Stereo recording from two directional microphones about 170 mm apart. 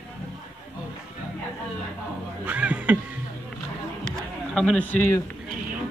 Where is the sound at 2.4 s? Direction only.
10° right (ahead or behind).